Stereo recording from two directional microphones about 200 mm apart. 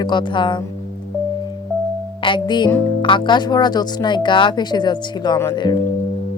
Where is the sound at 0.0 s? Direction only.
20° left (ahead or behind).